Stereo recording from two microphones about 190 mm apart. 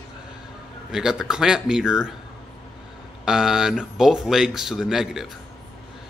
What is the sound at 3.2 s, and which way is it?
Speech, 5° right (ahead or behind).